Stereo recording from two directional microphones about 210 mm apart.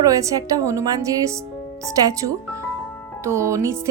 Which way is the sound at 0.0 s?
15° right (ahead or behind).